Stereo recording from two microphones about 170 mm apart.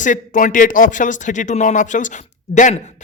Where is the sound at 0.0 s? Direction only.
50° left (ahead or behind).